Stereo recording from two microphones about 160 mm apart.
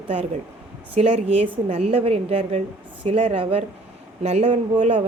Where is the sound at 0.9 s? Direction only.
40° right (ahead or behind).